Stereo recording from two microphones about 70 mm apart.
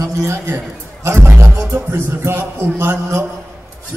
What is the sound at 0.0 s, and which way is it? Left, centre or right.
A man's voice, right.